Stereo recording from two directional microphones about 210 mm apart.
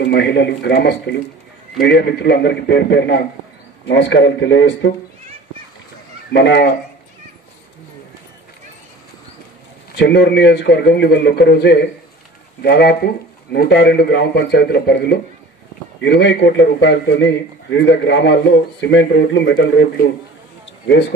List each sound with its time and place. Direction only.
0.0 s a man's voice: 55° left (ahead or behind)
6.3 s speech: 55° left (ahead or behind)
9.9 s a man's voice: 55° left (ahead or behind)